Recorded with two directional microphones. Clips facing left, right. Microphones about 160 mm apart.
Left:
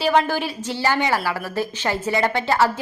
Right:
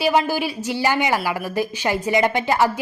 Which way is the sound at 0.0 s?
10° right (ahead or behind).